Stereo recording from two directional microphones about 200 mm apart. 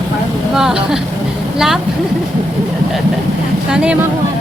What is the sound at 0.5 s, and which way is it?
A woman's voice, centre (ahead or behind).